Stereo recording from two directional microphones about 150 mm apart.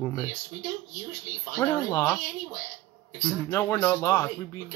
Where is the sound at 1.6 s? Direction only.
20° left (ahead or behind).